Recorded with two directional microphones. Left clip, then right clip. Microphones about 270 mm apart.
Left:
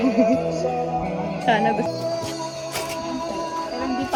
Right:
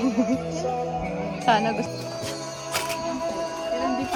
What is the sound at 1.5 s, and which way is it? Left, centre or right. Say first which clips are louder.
Speech: left 2 dB; centre.